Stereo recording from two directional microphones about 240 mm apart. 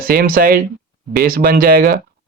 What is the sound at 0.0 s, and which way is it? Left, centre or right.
Speech, right.